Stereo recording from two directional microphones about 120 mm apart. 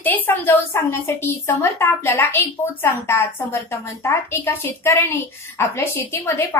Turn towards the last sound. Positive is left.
turn(degrees=20)  # may be behind; listen again after turning